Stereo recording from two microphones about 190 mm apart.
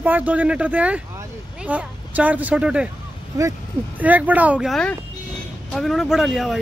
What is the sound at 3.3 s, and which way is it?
Speech, 20° right (ahead or behind).